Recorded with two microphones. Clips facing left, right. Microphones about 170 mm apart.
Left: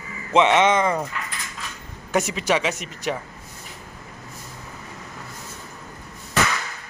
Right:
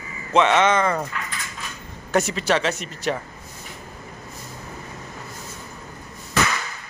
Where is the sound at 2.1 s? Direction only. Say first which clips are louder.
Right 1 dB; 10° left (ahead or behind).